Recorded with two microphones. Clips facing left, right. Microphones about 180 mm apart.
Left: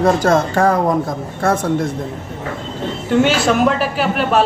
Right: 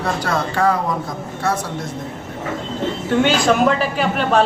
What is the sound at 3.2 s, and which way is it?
A man's voice, 5° left (ahead or behind).